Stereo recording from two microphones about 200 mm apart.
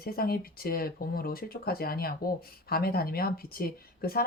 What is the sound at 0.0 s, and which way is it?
Speech, 50° left (ahead or behind).